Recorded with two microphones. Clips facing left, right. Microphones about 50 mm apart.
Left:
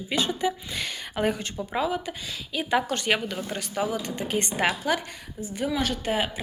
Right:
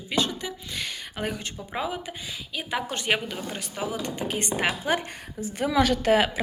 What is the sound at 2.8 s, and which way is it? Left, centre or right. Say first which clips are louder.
Speech: left 1 dB; centre.